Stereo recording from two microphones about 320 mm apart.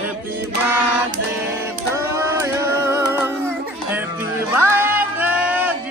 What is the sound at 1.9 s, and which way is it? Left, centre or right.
Music, centre.